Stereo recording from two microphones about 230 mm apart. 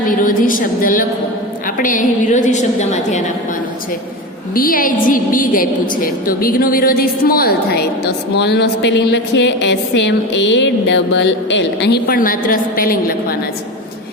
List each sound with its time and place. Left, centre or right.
0.1 s a woman's voice: left
4.5 s a woman's voice: left